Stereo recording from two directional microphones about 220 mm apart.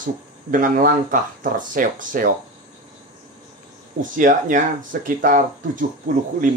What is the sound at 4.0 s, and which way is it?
Speech, 35° right (ahead or behind).